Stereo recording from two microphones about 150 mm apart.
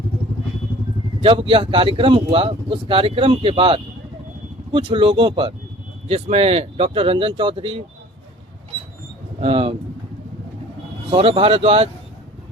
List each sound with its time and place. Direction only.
1.2 s a man's voice: 40° right (ahead or behind)
9.4 s a man's voice: 40° right (ahead or behind)
11.1 s a man's voice: 35° right (ahead or behind)